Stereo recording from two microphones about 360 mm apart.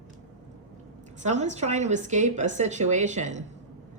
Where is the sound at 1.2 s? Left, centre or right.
Centre.